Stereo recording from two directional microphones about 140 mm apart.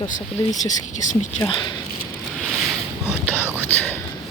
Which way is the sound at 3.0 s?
10° right (ahead or behind).